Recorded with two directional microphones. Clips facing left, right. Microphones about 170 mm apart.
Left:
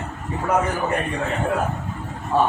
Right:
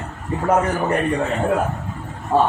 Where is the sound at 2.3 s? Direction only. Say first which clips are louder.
Right 2 dB; 45° right (ahead or behind).